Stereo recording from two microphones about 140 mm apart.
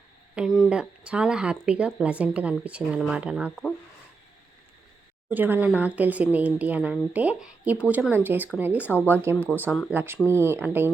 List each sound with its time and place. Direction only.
0.3 s speech: centre (ahead or behind)
5.3 s speech: 15° right (ahead or behind)
9.6 s speech: 10° left (ahead or behind)
9.9 s speech: 15° right (ahead or behind)